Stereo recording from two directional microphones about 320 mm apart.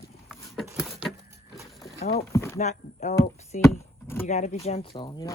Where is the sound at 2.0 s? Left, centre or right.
Left.